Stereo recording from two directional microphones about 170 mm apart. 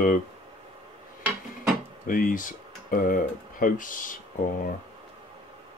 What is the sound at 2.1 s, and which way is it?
Speech, 55° left (ahead or behind).